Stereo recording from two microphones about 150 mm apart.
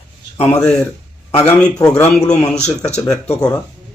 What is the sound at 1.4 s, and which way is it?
Speech, 20° left (ahead or behind).